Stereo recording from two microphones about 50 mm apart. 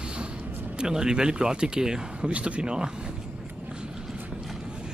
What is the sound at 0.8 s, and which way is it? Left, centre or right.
Speech, centre.